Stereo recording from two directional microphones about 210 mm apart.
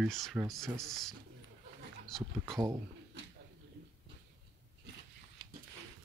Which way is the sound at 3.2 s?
60° right (ahead or behind).